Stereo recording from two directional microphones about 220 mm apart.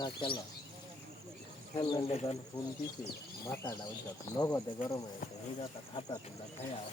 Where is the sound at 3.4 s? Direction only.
15° left (ahead or behind).